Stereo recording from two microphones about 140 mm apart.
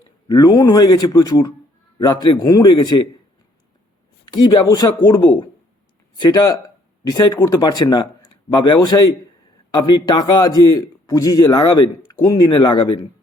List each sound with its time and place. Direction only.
0.3 s a man's voice: 30° left (ahead or behind)
4.3 s a man's voice: 30° left (ahead or behind)